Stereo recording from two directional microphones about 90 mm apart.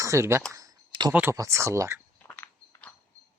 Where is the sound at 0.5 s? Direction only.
45° right (ahead or behind).